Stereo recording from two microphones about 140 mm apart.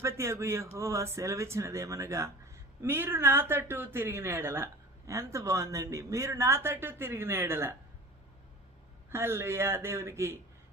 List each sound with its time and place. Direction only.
0.0 s speech: 20° right (ahead or behind)
9.0 s speech: 20° right (ahead or behind)